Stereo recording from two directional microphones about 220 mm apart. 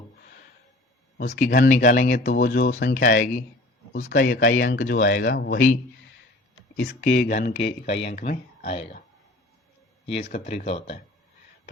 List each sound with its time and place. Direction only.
1.3 s speech: 40° left (ahead or behind)
6.8 s speech: 40° left (ahead or behind)
10.3 s speech: 35° left (ahead or behind)